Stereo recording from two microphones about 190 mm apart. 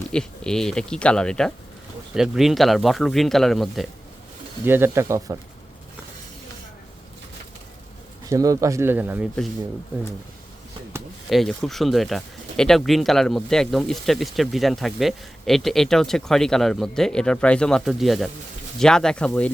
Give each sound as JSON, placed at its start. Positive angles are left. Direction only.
{"t": 0.1, "sound": "speech", "side_deg": 5}
{"t": 4.6, "sound": "speech", "side_deg": -10}
{"t": 8.3, "sound": "speech", "side_deg": -15}
{"t": 11.3, "sound": "speech", "side_deg": 0}